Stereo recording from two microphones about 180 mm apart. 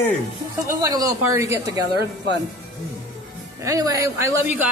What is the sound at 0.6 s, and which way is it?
A woman's voice, 20° right (ahead or behind).